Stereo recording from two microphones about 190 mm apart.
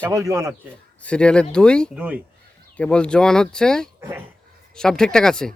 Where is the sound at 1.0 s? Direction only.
5° left (ahead or behind).